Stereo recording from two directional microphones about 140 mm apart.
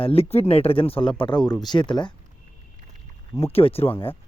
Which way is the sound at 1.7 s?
35° left (ahead or behind).